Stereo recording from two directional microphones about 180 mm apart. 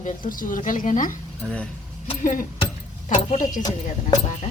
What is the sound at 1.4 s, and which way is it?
Speech, 5° left (ahead or behind).